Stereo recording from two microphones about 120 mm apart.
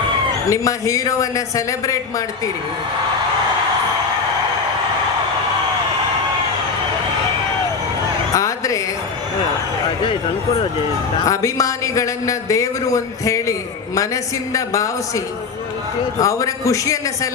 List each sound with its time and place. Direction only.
0.5 s a man's voice: 25° left (ahead or behind)
8.3 s a sound: 30° left (ahead or behind)
10.0 s speech: 45° left (ahead or behind)
11.2 s a man's voice: 30° left (ahead or behind)
16.2 s a man's voice: 25° left (ahead or behind)